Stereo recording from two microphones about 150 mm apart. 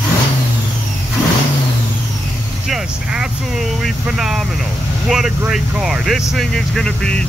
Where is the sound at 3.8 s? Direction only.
5° right (ahead or behind).